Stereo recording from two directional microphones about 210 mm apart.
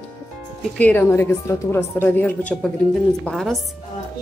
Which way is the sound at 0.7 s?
10° left (ahead or behind).